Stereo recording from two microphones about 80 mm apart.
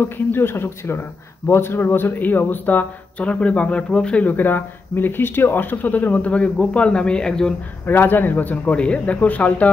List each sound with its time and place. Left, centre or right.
0.0 s a man's voice: left; by 7.5 s centre
7.8 s a man's voice: left